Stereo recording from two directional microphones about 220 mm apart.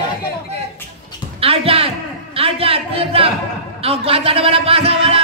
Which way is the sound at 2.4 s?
25° right (ahead or behind).